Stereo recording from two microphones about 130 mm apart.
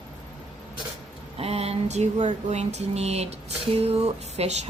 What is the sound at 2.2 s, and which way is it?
Speech, 60° right (ahead or behind).